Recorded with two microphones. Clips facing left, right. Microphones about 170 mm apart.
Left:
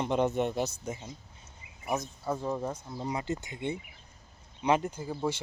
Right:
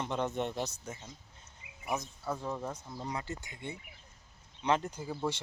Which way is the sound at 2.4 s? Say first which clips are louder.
Left 5 dB; 15° left (ahead or behind).